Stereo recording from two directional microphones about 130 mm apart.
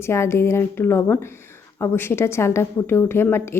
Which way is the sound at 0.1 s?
20° left (ahead or behind).